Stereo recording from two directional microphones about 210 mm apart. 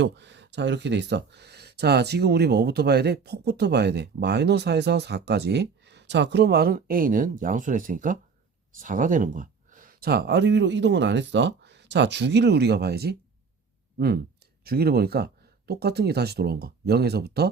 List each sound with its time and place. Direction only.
0.0 s speech: 55° right (ahead or behind)
14.6 s speech: 45° right (ahead or behind)